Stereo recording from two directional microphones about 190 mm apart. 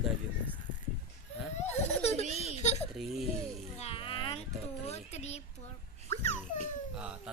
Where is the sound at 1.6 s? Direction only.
35° left (ahead or behind).